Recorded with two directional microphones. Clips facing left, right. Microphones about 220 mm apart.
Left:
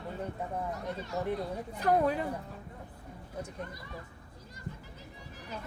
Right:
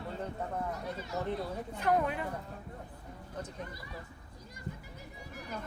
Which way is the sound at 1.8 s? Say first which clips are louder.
Left 3 dB; 35° left (ahead or behind).